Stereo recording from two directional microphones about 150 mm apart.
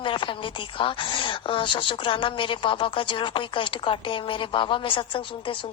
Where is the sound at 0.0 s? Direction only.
35° left (ahead or behind).